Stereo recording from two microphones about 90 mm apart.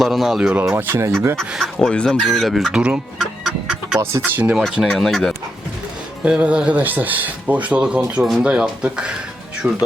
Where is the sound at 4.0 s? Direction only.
25° right (ahead or behind).